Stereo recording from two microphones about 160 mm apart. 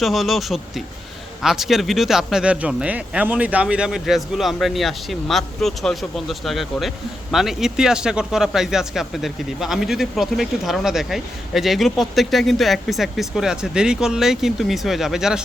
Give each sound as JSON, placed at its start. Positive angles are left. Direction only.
{"t": 0.0, "sound": "speech", "side_deg": 0}